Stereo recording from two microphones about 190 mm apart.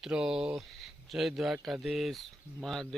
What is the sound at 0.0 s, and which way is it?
Speech, 5° right (ahead or behind).